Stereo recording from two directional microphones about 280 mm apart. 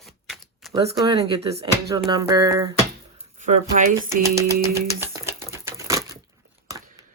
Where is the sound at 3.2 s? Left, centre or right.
Right.